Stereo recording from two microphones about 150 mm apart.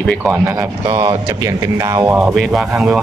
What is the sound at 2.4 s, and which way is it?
Speech, 5° right (ahead or behind).